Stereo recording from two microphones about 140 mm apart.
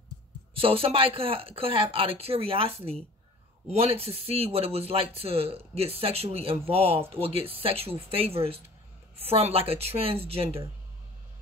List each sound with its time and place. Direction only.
0.6 s speech: 40° right (ahead or behind)